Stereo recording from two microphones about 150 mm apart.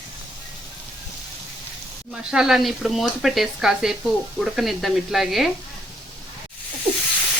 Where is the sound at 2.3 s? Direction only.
5° right (ahead or behind).